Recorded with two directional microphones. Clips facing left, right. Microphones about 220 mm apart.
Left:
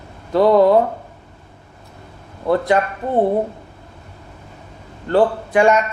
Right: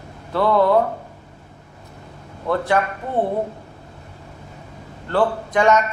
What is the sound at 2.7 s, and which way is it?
Speech, 20° left (ahead or behind).